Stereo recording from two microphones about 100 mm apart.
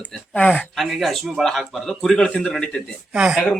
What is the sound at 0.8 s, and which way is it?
A man's voice, centre (ahead or behind).